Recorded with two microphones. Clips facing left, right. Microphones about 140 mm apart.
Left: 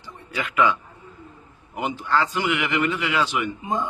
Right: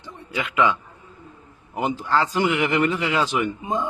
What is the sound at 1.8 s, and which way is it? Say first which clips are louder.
A man's voice: right 1 dB; 30° right (ahead or behind).